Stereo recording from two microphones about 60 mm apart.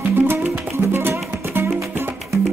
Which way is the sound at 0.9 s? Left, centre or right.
Right.